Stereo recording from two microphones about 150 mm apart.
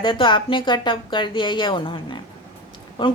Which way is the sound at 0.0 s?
35° left (ahead or behind).